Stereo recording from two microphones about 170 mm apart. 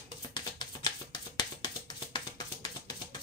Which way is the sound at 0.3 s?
25° left (ahead or behind).